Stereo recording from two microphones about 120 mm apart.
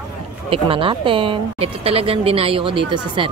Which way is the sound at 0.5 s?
50° right (ahead or behind).